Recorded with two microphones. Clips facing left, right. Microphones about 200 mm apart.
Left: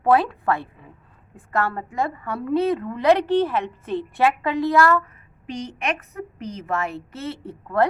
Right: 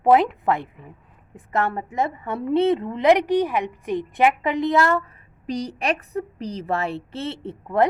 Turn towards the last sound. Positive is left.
turn(degrees=-20)  # may be behind; listen again after turning